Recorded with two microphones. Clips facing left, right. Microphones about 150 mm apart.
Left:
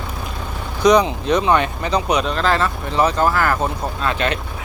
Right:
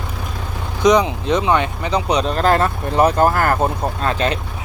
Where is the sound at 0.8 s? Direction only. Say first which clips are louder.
Even; 20° right (ahead or behind).